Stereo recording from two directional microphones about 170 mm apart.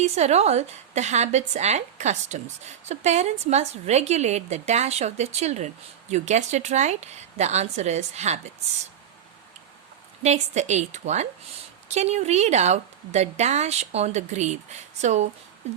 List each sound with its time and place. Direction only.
0.0 s a woman's voice: 40° right (ahead or behind)
10.2 s a woman's voice: 40° right (ahead or behind)